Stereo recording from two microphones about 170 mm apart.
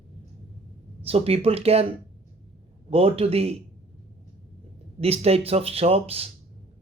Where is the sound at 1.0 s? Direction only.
35° right (ahead or behind).